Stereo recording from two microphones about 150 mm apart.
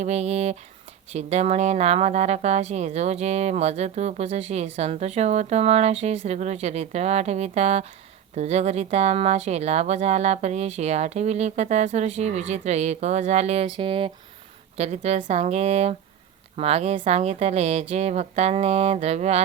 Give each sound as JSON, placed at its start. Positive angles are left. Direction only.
{"t": 0.0, "sound": "speech", "side_deg": -45}
{"t": 14.8, "sound": "speech", "side_deg": -45}